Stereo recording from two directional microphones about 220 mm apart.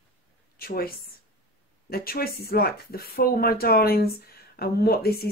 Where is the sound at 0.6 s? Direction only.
45° left (ahead or behind).